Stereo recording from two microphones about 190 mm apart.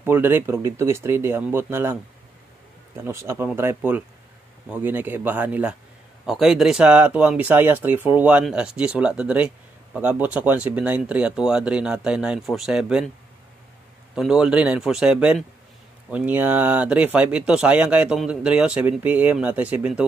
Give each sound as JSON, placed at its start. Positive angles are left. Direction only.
{"t": 0.0, "sound": "speech", "side_deg": -10}
{"t": 3.0, "sound": "speech", "side_deg": -15}
{"t": 14.1, "sound": "speech", "side_deg": -5}